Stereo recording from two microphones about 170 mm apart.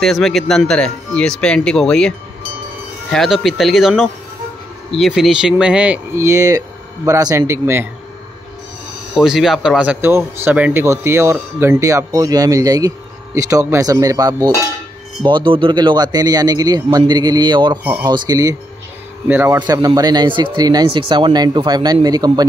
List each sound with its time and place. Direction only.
0.0 s speech: centre (ahead or behind); by 7.9 s 15° right (ahead or behind)
9.1 s speech: centre (ahead or behind)
19.6 s speech: 25° right (ahead or behind)